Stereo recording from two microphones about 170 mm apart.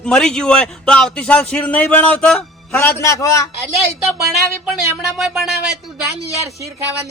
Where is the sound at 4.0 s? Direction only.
Centre (ahead or behind).